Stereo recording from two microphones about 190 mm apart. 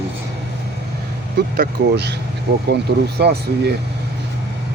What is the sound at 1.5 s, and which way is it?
Speech, 55° right (ahead or behind).